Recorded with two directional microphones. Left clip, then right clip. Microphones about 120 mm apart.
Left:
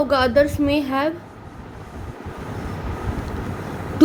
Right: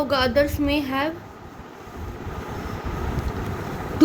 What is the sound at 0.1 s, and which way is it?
A woman's voice, 35° left (ahead or behind).